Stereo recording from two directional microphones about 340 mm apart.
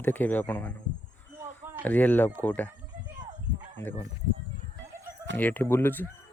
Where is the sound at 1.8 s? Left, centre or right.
Centre.